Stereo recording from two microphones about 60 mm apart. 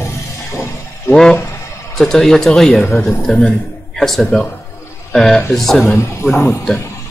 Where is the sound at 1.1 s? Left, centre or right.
Centre.